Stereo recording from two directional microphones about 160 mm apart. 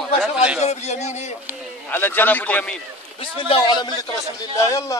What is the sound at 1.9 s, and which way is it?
Speech, 15° left (ahead or behind).